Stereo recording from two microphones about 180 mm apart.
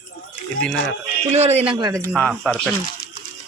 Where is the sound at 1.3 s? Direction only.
35° right (ahead or behind); by 2.1 s 20° right (ahead or behind).